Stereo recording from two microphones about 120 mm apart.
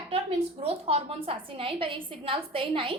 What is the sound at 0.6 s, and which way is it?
A woman's voice, 55° right (ahead or behind).